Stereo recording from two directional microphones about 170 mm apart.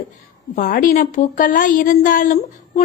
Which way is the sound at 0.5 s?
55° left (ahead or behind).